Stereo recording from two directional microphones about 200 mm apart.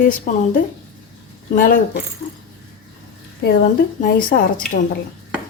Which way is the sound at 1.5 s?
45° left (ahead or behind).